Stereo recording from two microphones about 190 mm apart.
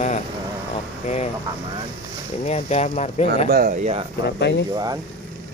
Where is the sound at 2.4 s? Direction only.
35° left (ahead or behind).